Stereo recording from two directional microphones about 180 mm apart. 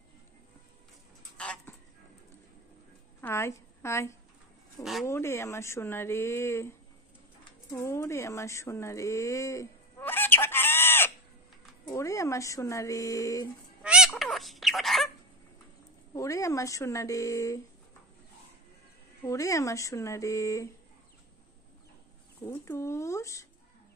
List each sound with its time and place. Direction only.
1.4 s a sound: 5° left (ahead or behind)
3.2 s a woman's voice: 15° left (ahead or behind)
7.7 s a sound: 15° left (ahead or behind)
11.8 s speech: 15° left (ahead or behind)
13.8 s fowl: 5° right (ahead or behind)
16.1 s speech: 20° left (ahead or behind)
19.2 s speech: 20° left (ahead or behind)
22.4 s speech: 15° left (ahead or behind)